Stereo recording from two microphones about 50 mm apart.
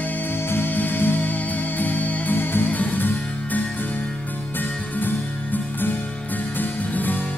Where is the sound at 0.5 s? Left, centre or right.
Left.